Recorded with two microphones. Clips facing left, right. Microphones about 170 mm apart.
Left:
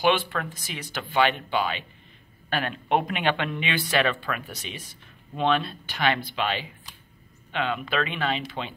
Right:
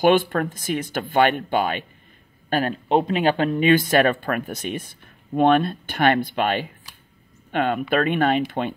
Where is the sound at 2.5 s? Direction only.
40° right (ahead or behind).